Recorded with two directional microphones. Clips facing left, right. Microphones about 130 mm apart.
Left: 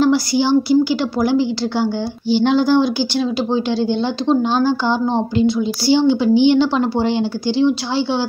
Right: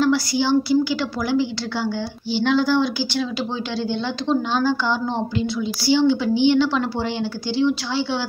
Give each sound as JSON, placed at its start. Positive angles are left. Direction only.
{"t": 0.0, "sound": "a woman's voice", "side_deg": 15}
{"t": 0.8, "sound": "a woman's voice", "side_deg": 30}